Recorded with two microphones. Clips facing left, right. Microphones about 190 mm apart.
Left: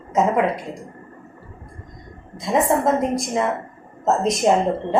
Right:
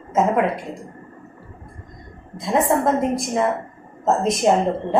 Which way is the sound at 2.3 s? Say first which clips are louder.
Even; centre (ahead or behind).